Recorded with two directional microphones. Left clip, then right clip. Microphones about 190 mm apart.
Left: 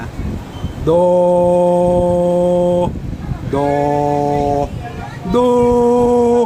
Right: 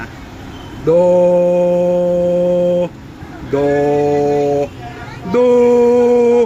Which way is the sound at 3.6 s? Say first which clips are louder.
Right 1 dB; 20° left (ahead or behind).